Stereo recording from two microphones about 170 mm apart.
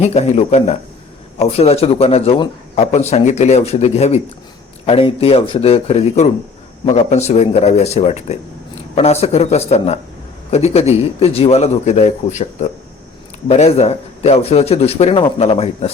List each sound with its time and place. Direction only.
0.0 s speech: 40° left (ahead or behind)